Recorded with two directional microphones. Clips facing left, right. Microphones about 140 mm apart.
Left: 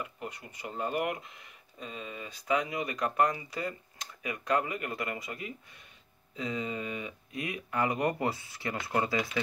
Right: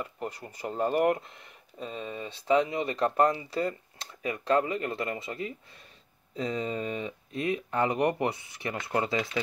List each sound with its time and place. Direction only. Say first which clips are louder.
0.0 s speech: right 4 dB; 35° right (ahead or behind)